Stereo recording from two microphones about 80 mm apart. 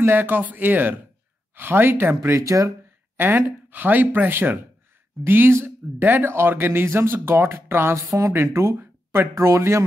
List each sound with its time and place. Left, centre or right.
0.0 s speech: right
2.4 s speech: right
3.2 s speech: right
8.7 s a sound: right
9.3 s speech: right